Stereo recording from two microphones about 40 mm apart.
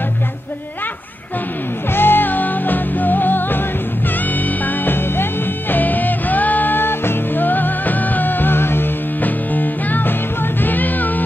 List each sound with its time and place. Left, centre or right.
2.0 s music: left
4.8 s music: left
5.8 s music: left
9.2 s music: left